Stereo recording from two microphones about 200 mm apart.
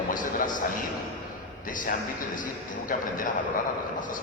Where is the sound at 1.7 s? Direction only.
40° left (ahead or behind).